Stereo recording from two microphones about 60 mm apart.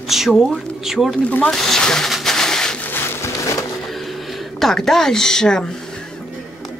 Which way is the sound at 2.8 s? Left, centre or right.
Left.